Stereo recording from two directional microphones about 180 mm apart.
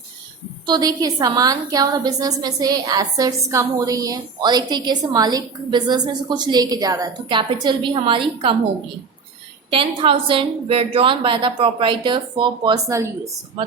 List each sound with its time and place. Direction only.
0.6 s a woman's voice: 25° right (ahead or behind)
9.6 s a woman's voice: 30° right (ahead or behind)